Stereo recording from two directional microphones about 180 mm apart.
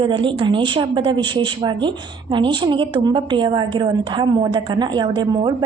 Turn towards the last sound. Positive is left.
turn(degrees=-25)  # may be behind; listen again after turning